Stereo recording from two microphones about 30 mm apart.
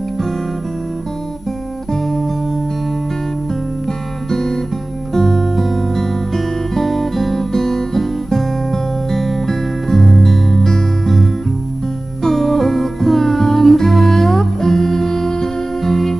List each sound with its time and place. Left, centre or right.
1.9 s music: centre
3.8 s music: centre
7.3 s music: centre
12.3 s music: centre